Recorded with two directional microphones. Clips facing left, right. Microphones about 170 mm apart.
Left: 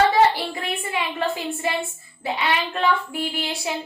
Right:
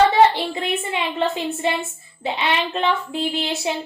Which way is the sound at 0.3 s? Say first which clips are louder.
Right 4 dB; 20° right (ahead or behind).